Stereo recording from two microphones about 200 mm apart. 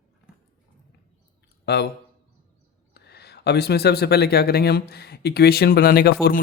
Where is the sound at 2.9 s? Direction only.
55° left (ahead or behind).